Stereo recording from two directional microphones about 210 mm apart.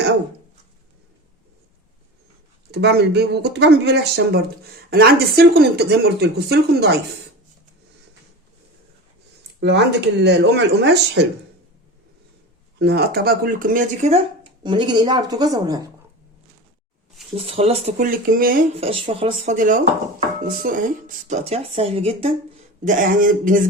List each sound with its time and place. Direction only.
2.7 s speech: 50° right (ahead or behind)
9.6 s speech: 55° right (ahead or behind)
12.8 s speech: 50° right (ahead or behind); by 15.8 s 20° right (ahead or behind)
17.3 s speech: 25° right (ahead or behind)
18.0 s speech: 40° right (ahead or behind)
18.8 s speech: 25° right (ahead or behind)
19.5 s a sound: 40° right (ahead or behind)
21.2 s speech: 30° right (ahead or behind)
22.8 s a sound: 40° right (ahead or behind)